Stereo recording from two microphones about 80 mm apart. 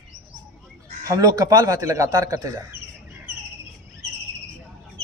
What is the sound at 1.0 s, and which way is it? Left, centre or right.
Speech, right.